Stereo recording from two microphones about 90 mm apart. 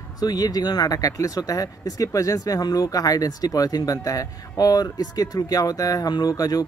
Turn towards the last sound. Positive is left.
turn(degrees=45)  # may be behind; listen again after turning